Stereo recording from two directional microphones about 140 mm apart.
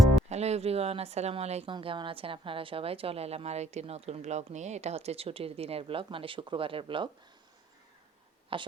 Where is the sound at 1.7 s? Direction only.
35° right (ahead or behind).